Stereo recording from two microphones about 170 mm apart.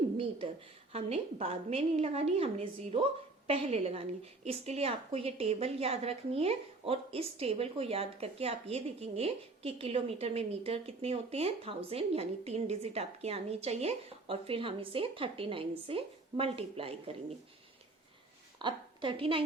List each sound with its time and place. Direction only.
0.2 s a woman's voice: 30° right (ahead or behind)
18.6 s a woman's voice: 30° right (ahead or behind)